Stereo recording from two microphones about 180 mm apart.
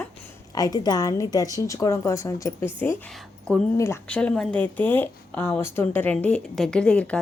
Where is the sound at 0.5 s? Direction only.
20° left (ahead or behind).